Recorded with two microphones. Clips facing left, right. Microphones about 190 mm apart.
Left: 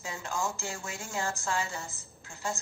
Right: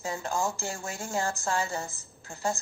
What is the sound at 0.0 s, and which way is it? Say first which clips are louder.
A woman's voice: right 4 dB; 40° right (ahead or behind).